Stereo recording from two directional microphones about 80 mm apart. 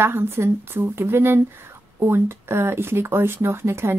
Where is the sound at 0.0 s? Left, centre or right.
Right.